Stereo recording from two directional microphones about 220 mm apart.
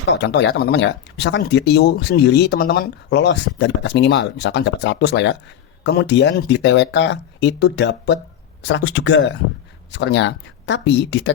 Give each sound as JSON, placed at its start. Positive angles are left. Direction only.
{"t": 0.1, "sound": "speech", "side_deg": 55}